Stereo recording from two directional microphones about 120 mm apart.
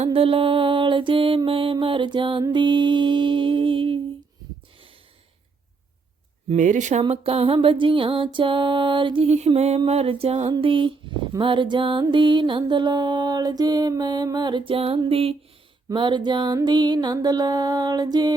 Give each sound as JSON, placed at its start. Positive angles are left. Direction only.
{"t": 0.0, "sound": "music", "side_deg": -50}
{"t": 6.6, "sound": "speech", "side_deg": -85}
{"t": 7.1, "sound": "music", "side_deg": -50}
{"t": 9.2, "sound": "a sound", "side_deg": -65}
{"t": 10.6, "sound": "music", "side_deg": -45}
{"t": 15.9, "sound": "music", "side_deg": -40}